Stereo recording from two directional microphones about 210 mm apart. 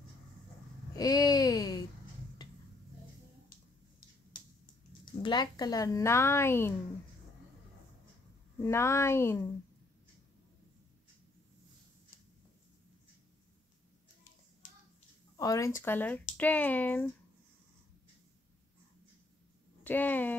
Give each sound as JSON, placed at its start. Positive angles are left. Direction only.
{"t": 0.9, "sound": "a sound", "side_deg": 20}
{"t": 5.2, "sound": "speech", "side_deg": 20}
{"t": 8.6, "sound": "speech", "side_deg": 15}
{"t": 15.3, "sound": "speech", "side_deg": 15}
{"t": 19.8, "sound": "speech", "side_deg": 10}